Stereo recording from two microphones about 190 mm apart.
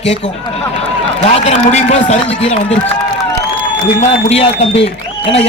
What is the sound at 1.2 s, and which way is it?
A man's voice, 35° left (ahead or behind).